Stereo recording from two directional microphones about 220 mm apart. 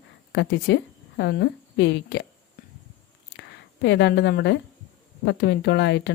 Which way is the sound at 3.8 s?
50° left (ahead or behind).